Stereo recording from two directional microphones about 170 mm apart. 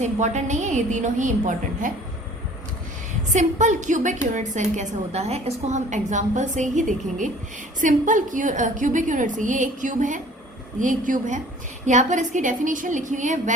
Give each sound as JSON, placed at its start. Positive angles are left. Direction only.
{"t": 0.0, "sound": "a woman's voice", "side_deg": -45}
{"t": 3.3, "sound": "a woman's voice", "side_deg": -45}